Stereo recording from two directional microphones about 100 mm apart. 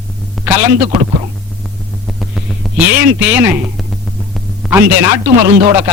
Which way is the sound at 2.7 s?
15° right (ahead or behind).